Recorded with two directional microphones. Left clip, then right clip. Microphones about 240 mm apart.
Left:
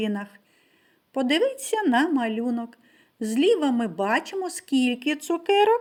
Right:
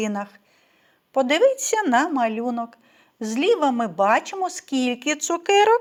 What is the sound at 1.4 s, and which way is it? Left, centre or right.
Speech, right.